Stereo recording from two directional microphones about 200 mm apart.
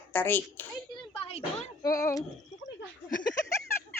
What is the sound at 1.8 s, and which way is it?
Speech, 15° left (ahead or behind).